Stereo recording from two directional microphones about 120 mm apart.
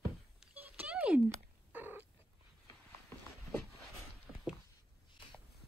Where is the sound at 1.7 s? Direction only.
15° right (ahead or behind).